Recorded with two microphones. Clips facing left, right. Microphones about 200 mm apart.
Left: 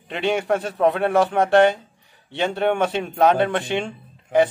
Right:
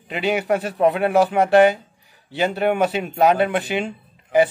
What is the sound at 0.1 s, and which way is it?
Speech, 5° right (ahead or behind).